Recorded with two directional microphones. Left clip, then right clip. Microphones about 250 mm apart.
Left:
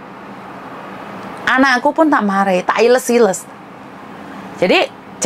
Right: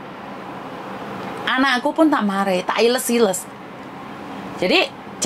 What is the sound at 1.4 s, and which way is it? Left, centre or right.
A woman's voice, left.